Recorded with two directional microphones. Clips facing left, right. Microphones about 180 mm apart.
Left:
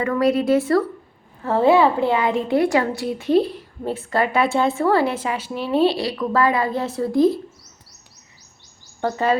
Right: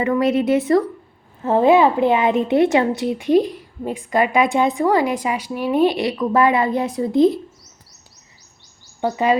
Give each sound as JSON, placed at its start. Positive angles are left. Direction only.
{"t": 0.0, "sound": "a woman's voice", "side_deg": -20}
{"t": 9.0, "sound": "speech", "side_deg": -15}